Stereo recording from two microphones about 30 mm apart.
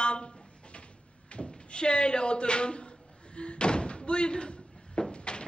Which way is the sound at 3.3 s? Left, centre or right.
Left.